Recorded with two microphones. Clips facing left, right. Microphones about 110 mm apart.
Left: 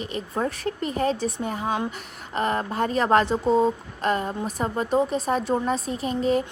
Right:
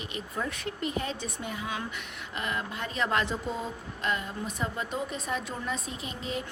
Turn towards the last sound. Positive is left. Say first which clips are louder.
# left 13 dB
turn(degrees=40)  # may be behind; listen again after turning